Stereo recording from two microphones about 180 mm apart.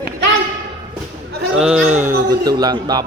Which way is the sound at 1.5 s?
5° right (ahead or behind).